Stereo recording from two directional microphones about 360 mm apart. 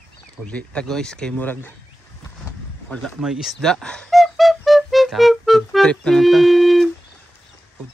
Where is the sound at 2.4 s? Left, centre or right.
Centre.